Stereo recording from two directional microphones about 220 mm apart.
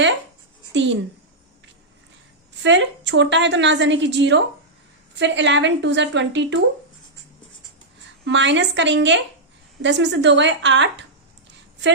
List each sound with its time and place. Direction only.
0.7 s a woman's voice: 55° right (ahead or behind)
2.6 s a woman's voice: 55° right (ahead or behind)
8.2 s a woman's voice: 55° right (ahead or behind)